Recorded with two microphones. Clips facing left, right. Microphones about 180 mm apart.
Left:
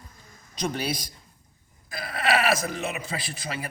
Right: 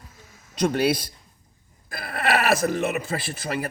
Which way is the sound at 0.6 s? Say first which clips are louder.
Right 8 dB; 60° right (ahead or behind).